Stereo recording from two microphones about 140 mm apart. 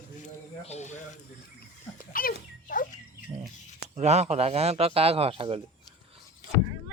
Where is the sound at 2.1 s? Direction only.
85° left.